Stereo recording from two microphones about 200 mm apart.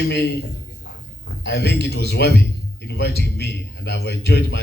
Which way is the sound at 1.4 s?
55° left (ahead or behind).